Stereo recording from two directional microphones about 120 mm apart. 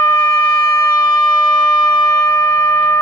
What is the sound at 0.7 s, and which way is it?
Shofar, 30° left (ahead or behind).